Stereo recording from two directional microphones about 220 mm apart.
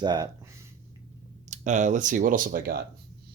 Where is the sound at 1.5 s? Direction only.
35° right (ahead or behind).